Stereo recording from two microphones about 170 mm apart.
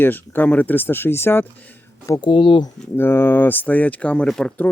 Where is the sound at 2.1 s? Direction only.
25° left (ahead or behind).